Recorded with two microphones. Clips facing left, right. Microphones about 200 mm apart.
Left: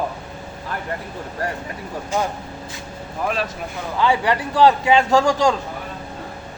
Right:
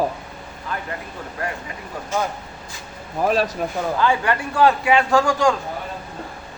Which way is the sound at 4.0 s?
20° left (ahead or behind).